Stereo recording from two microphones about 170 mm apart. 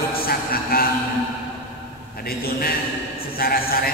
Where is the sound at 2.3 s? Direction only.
60° left (ahead or behind).